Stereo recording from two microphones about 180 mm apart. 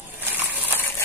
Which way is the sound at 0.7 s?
10° left (ahead or behind).